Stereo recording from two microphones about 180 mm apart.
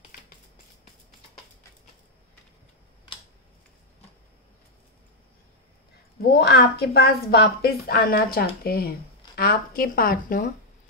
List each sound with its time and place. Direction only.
6.3 s a woman's voice: 60° left (ahead or behind)